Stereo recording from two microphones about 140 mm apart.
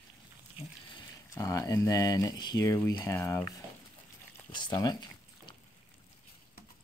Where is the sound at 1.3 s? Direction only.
25° left (ahead or behind).